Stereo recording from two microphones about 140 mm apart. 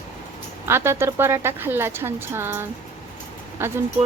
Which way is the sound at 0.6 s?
15° right (ahead or behind).